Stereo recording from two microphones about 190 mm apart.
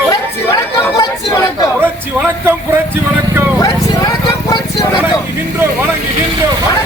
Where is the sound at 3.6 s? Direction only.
20° left (ahead or behind).